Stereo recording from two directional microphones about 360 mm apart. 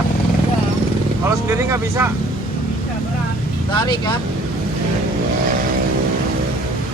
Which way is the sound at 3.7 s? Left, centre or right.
Centre.